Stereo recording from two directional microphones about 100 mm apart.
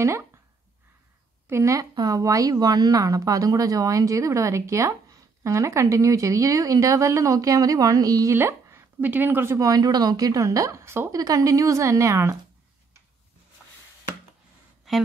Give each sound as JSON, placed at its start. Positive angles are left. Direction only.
{"t": 1.5, "sound": "a woman's voice", "side_deg": -30}
{"t": 8.4, "sound": "speech", "side_deg": -25}
{"t": 9.7, "sound": "a woman's voice", "side_deg": -40}
{"t": 11.1, "sound": "a woman's voice", "side_deg": -35}
{"t": 14.9, "sound": "a woman's voice", "side_deg": -5}